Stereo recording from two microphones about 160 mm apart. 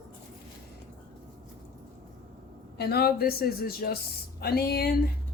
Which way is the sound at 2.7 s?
80° left.